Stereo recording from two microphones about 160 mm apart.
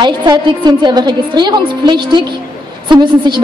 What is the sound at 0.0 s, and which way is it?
A woman's voice, 30° right (ahead or behind).